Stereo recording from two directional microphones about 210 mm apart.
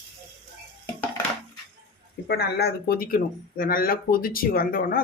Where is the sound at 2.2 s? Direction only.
50° left (ahead or behind).